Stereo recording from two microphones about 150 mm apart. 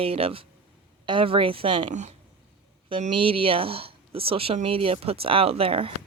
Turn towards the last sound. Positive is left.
turn(degrees=-40)  # may be behind; listen again after turning